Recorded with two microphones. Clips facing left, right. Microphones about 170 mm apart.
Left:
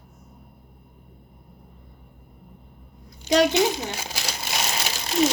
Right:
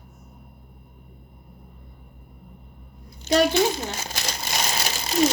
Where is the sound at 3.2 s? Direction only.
15° left (ahead or behind).